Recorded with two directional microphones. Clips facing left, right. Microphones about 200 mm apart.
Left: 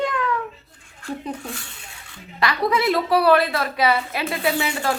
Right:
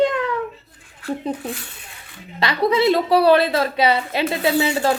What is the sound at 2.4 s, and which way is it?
A woman's voice, 25° right (ahead or behind).